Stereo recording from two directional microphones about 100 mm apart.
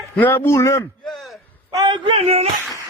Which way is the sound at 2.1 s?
85° right.